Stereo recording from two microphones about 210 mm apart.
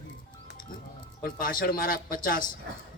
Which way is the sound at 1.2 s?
45° left (ahead or behind).